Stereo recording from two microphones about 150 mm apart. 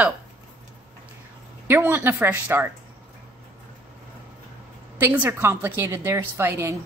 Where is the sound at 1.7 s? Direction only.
15° right (ahead or behind).